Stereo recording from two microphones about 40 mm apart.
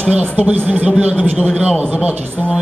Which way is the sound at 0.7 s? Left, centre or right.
Right.